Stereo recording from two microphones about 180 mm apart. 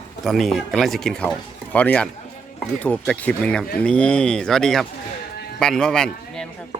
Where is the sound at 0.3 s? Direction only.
Centre (ahead or behind).